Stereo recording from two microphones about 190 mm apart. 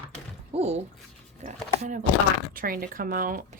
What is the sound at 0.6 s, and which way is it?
Dog, 35° right (ahead or behind).